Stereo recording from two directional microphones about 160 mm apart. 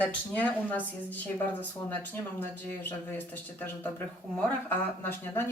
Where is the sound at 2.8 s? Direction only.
10° left (ahead or behind).